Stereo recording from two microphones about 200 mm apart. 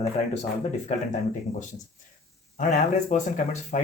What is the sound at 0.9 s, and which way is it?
Speech, 35° left (ahead or behind).